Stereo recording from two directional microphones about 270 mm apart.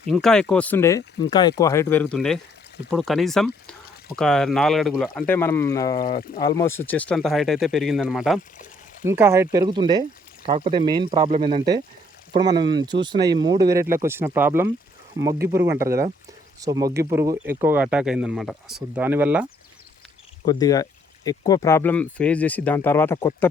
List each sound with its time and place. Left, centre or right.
0.1 s speech: centre
6.0 s speech: left
6.4 s speech: centre
15.8 s speech: right
16.6 s speech: centre
20.4 s speech: centre